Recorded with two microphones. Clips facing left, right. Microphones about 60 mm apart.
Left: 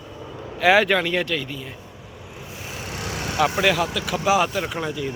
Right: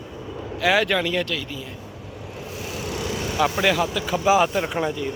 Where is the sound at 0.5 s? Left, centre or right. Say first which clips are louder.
Left 3 dB; centre.